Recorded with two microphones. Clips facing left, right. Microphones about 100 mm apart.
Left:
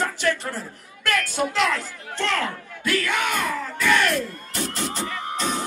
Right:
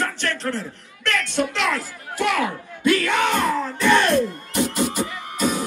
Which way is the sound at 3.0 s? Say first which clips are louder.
Right 4 dB; 25° right (ahead or behind).